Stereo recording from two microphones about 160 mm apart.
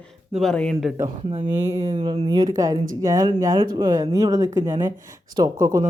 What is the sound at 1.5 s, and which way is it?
Speech, 15° right (ahead or behind).